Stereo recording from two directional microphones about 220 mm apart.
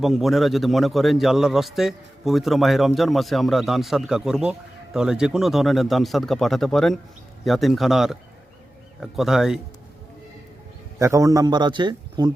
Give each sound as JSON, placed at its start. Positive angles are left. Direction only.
{"t": 0.0, "sound": "a man's voice", "side_deg": 0}
{"t": 11.0, "sound": "a man's voice", "side_deg": -15}